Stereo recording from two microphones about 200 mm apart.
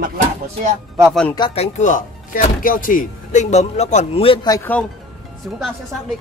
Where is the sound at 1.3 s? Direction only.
25° left (ahead or behind).